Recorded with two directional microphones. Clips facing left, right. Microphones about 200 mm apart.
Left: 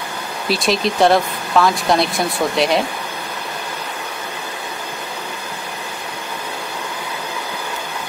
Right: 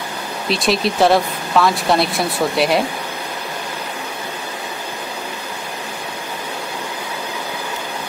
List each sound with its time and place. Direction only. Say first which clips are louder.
0.5 s speech: even; centre (ahead or behind)